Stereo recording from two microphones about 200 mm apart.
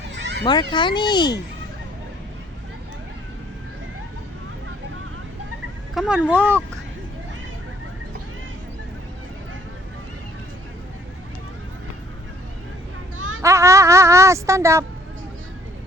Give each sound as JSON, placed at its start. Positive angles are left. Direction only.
{"t": 0.1, "sound": "children playing", "side_deg": -60}
{"t": 0.4, "sound": "speech", "side_deg": 20}
{"t": 5.9, "sound": "speech", "side_deg": -5}
{"t": 13.1, "sound": "a sound", "side_deg": -80}
{"t": 13.4, "sound": "speech", "side_deg": -15}